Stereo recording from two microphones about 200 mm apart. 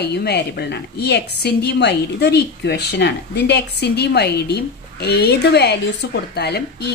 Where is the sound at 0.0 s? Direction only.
55° left (ahead or behind).